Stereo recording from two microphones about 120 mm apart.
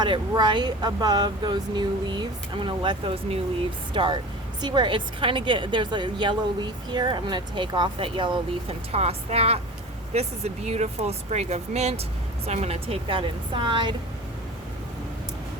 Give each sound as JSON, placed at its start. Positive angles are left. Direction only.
{"t": 0.0, "sound": "a woman's voice", "side_deg": -40}
{"t": 8.9, "sound": "a woman's voice", "side_deg": -60}